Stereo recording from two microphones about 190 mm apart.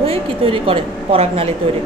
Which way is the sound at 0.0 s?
30° right (ahead or behind).